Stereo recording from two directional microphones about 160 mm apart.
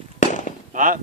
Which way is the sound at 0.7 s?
55° right (ahead or behind).